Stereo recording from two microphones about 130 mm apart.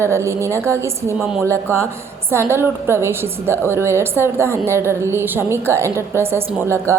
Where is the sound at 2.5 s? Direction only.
20° right (ahead or behind).